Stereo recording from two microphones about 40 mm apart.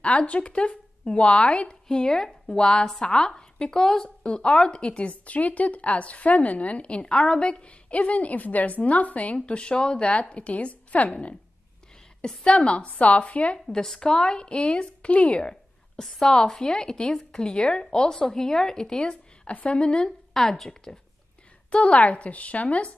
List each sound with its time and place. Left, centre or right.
0.0 s a woman's voice: left
1.9 s a woman's voice: centre
4.2 s a woman's voice: left
12.4 s speech: left
13.7 s a woman's voice: centre
16.0 s a woman's voice: centre
20.3 s a woman's voice: centre
21.6 s speech: left